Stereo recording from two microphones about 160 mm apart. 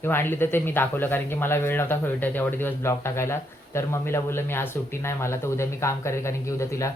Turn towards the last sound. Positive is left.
turn(degrees=20)  # may be behind; listen again after turning